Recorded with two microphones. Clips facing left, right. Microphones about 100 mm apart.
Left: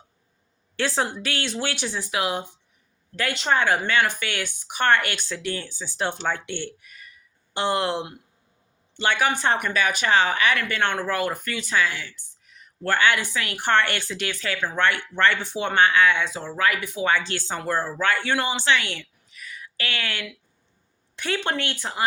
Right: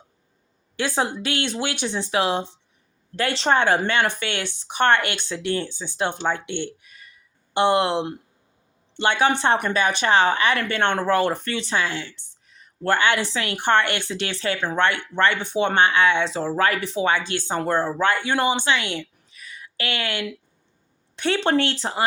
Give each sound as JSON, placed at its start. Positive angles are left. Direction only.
{"t": 0.8, "sound": "speech", "side_deg": -15}